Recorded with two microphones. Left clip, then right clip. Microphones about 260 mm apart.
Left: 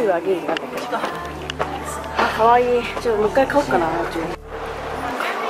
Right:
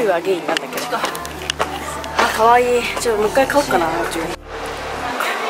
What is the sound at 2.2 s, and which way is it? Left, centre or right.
Speech, centre.